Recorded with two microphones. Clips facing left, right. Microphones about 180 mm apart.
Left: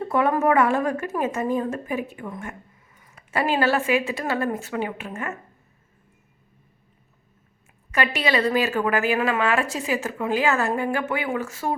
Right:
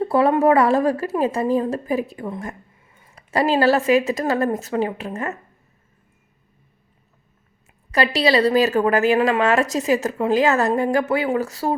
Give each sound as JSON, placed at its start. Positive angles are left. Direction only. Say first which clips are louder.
{"t": 0.0, "sound": "a woman's voice", "louder": "right 5 dB", "side_deg": -30}
{"t": 7.9, "sound": "a woman's voice", "louder": "right 5 dB", "side_deg": -35}